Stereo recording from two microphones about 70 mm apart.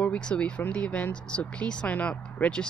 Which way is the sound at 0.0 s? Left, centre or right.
Centre.